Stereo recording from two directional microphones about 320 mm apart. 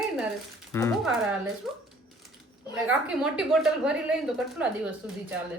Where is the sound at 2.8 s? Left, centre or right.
Centre.